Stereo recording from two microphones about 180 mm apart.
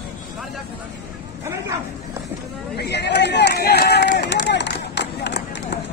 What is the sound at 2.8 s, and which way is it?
Run, 70° left (ahead or behind).